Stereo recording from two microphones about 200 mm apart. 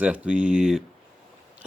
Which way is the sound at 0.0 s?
5° right (ahead or behind).